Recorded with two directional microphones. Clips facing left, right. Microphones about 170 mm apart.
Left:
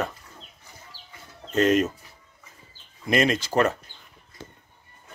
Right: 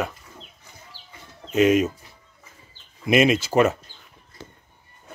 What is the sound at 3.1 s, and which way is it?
Speech, 10° right (ahead or behind).